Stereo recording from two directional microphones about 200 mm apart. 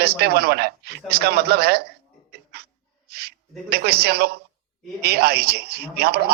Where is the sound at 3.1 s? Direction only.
50° right (ahead or behind).